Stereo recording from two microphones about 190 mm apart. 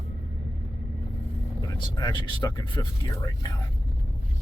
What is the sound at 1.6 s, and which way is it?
Speech, 20° left (ahead or behind).